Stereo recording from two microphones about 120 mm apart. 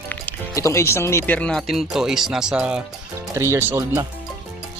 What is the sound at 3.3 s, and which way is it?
Speech, 25° right (ahead or behind).